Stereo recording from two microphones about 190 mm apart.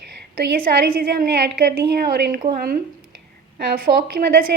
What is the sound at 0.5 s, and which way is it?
A woman's voice, 50° right (ahead or behind).